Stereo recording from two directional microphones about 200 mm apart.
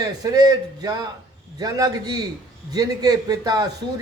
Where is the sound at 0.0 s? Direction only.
20° right (ahead or behind).